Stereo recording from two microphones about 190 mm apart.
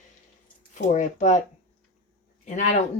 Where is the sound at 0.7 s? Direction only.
40° left (ahead or behind).